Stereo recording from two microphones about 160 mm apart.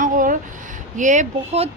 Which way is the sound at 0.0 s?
55° right (ahead or behind).